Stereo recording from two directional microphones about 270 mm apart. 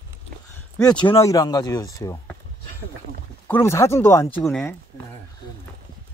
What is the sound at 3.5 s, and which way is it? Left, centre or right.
Speech, centre.